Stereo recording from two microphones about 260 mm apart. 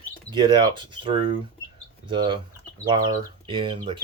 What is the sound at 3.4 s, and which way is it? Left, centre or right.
Speech, centre.